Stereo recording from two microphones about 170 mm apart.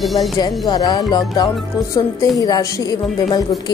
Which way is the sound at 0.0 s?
Centre (ahead or behind).